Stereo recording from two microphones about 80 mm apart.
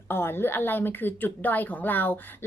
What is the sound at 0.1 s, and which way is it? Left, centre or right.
A woman's voice, left.